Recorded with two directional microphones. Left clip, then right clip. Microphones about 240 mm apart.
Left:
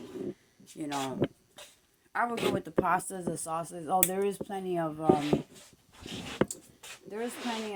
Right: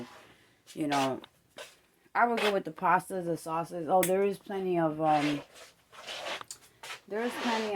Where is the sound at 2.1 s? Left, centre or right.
Centre.